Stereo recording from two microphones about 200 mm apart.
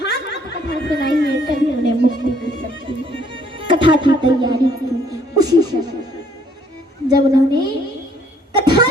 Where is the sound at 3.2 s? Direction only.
25° right (ahead or behind).